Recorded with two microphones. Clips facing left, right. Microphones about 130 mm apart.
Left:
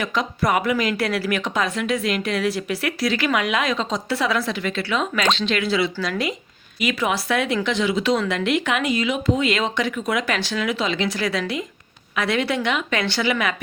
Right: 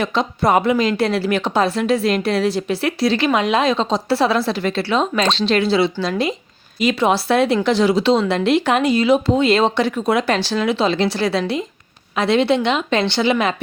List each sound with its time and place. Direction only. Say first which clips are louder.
0.0 s a woman's voice: right 4 dB; 30° right (ahead or behind)